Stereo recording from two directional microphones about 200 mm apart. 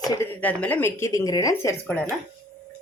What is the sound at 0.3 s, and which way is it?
Speech, 10° left (ahead or behind).